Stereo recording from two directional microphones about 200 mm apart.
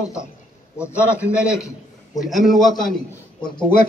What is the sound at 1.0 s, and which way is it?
A man's voice, 5° right (ahead or behind).